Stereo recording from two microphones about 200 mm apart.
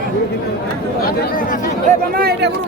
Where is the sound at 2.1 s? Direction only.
50° right (ahead or behind).